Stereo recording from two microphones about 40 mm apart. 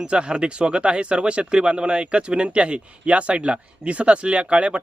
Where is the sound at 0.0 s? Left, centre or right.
Right.